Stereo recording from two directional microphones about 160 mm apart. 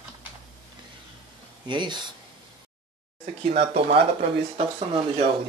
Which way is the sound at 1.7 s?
30° right (ahead or behind).